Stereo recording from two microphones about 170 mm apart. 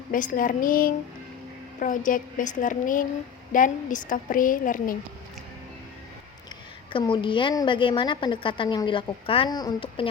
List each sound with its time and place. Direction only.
0.1 s a woman's voice: 50° left (ahead or behind)
6.9 s a woman's voice: 30° left (ahead or behind)